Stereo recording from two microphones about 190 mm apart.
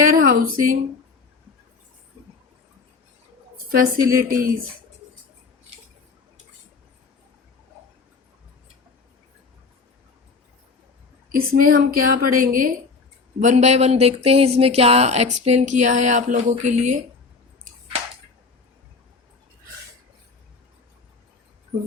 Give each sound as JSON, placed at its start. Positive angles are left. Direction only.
{"t": 0.0, "sound": "speech", "side_deg": -45}
{"t": 3.8, "sound": "a woman's voice", "side_deg": -45}
{"t": 11.3, "sound": "a woman's voice", "side_deg": -50}